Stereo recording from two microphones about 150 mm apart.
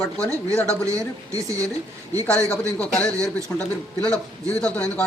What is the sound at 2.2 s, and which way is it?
A man's voice, 10° left (ahead or behind).